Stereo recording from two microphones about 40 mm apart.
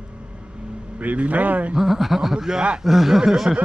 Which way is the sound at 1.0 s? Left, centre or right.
Right.